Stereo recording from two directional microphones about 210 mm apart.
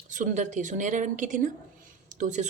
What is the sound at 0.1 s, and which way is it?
Speech, 35° right (ahead or behind).